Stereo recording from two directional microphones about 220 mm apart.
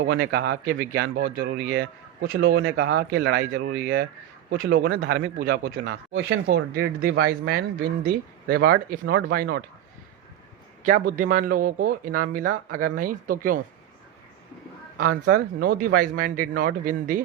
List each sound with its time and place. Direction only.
0.0 s speech: 45° right (ahead or behind)
4.7 s speech: 55° right (ahead or behind)
4.9 s speech: 45° right (ahead or behind); by 6.6 s 60° right (ahead or behind)
6.7 s speech: 45° right (ahead or behind)
10.8 s speech: 35° right (ahead or behind)
15.0 s speech: 40° right (ahead or behind)